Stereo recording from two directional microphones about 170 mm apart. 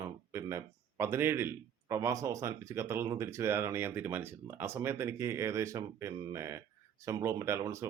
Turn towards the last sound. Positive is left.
turn(degrees=-15)  # may be behind; listen again after turning